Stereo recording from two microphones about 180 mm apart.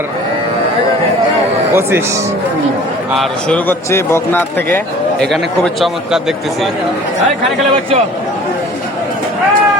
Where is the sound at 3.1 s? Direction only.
10° left (ahead or behind).